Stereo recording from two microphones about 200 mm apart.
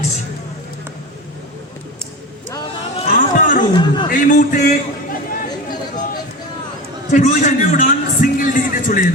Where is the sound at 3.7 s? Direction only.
25° left (ahead or behind).